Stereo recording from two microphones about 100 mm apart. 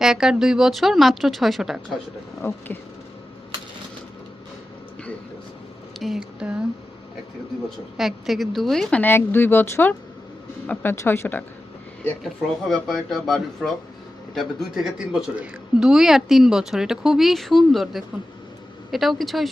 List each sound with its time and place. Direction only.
0.0 s speech: 5° right (ahead or behind)
2.4 s speech: 25° left (ahead or behind)
6.0 s a sound: 5° right (ahead or behind)
7.9 s speech: centre (ahead or behind)
9.0 s speech: 20° left (ahead or behind)
10.9 s speech: 25° left (ahead or behind)
12.2 s speech: centre (ahead or behind)